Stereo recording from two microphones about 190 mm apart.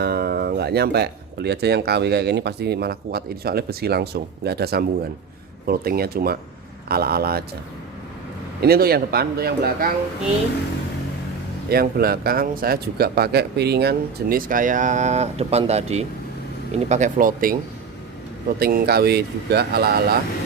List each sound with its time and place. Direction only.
0.0 s speech: 55° right (ahead or behind)
8.6 s speech: 55° right (ahead or behind)
11.7 s speech: 55° right (ahead or behind)
18.6 s speech: 55° right (ahead or behind)